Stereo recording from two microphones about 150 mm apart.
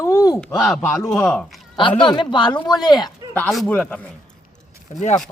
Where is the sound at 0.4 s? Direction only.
Centre (ahead or behind).